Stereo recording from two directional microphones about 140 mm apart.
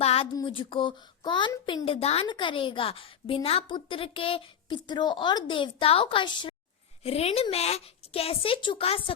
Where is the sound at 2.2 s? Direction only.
35° left (ahead or behind).